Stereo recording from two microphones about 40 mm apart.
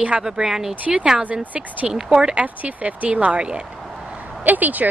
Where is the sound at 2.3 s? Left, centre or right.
Right.